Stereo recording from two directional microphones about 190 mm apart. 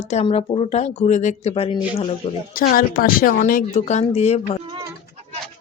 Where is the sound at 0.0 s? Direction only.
35° left (ahead or behind).